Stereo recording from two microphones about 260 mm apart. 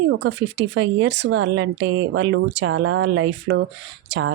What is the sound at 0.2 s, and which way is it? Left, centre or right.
Speech, right.